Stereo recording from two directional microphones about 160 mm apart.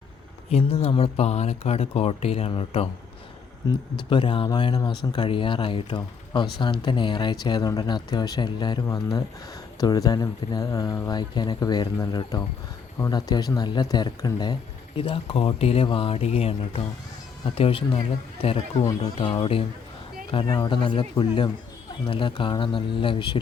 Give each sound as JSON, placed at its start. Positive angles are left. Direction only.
{"t": 0.5, "sound": "speech", "side_deg": 40}
{"t": 3.9, "sound": "speech", "side_deg": 30}
{"t": 19.0, "sound": "speech", "side_deg": 30}